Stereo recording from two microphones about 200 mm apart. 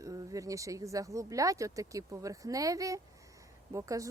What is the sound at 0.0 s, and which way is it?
Speech, 15° right (ahead or behind).